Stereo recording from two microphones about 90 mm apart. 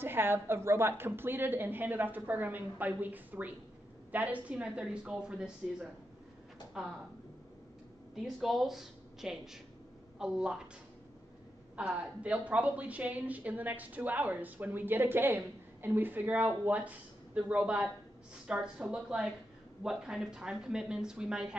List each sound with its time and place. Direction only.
0.0 s a woman's voice: 25° right (ahead or behind); by 6.9 s 5° right (ahead or behind)
8.2 s a woman's voice: centre (ahead or behind)
11.7 s speech: 10° right (ahead or behind)